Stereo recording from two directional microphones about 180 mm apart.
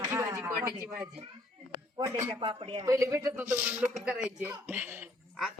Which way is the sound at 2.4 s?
25° right (ahead or behind).